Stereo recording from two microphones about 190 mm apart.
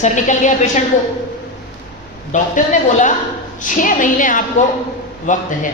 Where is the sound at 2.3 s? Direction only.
40° left (ahead or behind).